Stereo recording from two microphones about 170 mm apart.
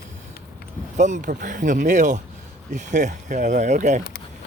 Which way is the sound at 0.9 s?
45° right (ahead or behind).